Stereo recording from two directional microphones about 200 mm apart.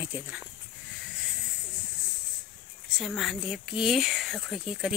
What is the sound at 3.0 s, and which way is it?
Speech, centre (ahead or behind).